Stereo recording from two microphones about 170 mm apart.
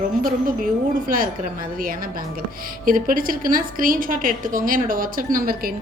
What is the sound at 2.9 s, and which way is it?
A woman's voice, 55° right (ahead or behind).